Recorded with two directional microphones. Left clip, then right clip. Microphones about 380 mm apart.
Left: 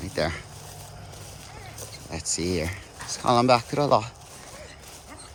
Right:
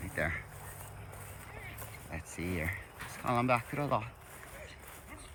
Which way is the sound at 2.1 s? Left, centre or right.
Centre.